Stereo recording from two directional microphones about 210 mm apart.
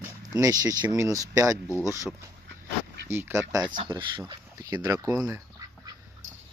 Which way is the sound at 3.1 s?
10° right (ahead or behind).